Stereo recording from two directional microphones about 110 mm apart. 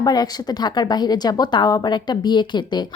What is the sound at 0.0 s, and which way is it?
A woman's voice, 40° left (ahead or behind).